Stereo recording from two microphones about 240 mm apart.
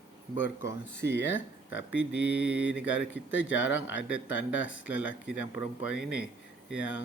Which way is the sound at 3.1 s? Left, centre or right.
Left.